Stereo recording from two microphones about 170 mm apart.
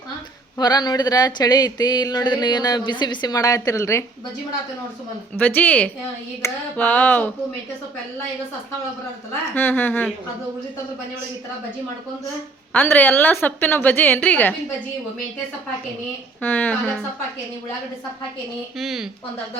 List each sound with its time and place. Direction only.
0.6 s speech: 25° left (ahead or behind)
5.4 s a woman's voice: 10° left (ahead or behind)
9.6 s a woman's voice: 10° left (ahead or behind)
12.7 s a woman's voice: 10° left (ahead or behind)
16.4 s a woman's voice: 10° left (ahead or behind)
18.8 s speech: centre (ahead or behind)